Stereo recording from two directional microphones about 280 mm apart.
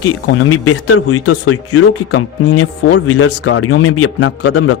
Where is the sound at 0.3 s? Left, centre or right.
Left.